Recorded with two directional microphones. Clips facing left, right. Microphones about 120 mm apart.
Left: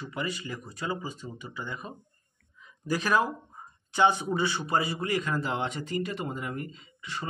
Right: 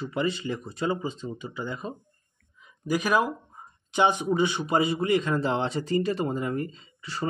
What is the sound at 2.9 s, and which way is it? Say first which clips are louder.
A man's voice: right 2 dB; 15° right (ahead or behind).